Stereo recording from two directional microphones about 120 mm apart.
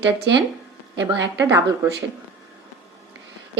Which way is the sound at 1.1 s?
20° right (ahead or behind).